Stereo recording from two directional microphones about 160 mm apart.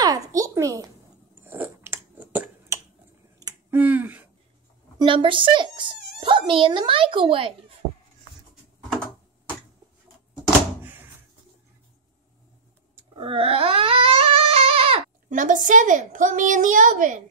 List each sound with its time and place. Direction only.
0.0 s a sound: 20° right (ahead or behind)
1.4 s chewing: 15° right (ahead or behind)
3.7 s speech: 10° right (ahead or behind)
4.9 s a child's voice: 30° right (ahead or behind)
13.1 s a sound: 35° right (ahead or behind)
15.2 s a woman's voice: 55° right (ahead or behind)